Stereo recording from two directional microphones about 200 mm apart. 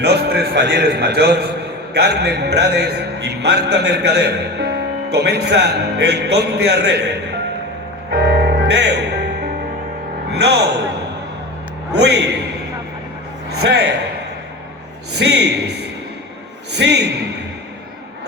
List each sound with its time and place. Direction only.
0.0 s a man's voice: 55° right (ahead or behind)
8.1 s music: 55° right (ahead or behind)
10.3 s speech: 55° right (ahead or behind)
11.9 s a man's voice: 55° right (ahead or behind)
13.6 s a man's voice: 55° right (ahead or behind)
15.2 s a man's voice: 55° right (ahead or behind)